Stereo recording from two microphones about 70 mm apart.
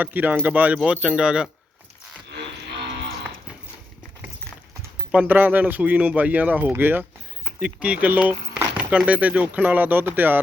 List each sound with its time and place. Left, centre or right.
0.0 s speech: right
0.8 s speech: centre
5.2 s speech: right
7.4 s speech: centre